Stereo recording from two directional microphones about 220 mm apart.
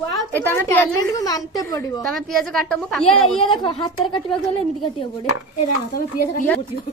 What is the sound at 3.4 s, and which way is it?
Speech, 20° left (ahead or behind).